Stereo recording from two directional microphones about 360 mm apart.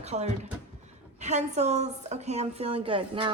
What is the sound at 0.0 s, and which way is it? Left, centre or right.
A woman's voice, centre.